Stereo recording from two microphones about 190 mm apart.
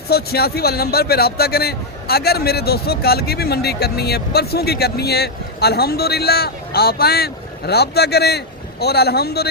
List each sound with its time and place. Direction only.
0.1 s a man's voice: 55° left (ahead or behind)